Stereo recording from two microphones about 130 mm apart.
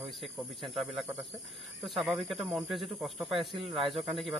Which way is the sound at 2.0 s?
Centre (ahead or behind).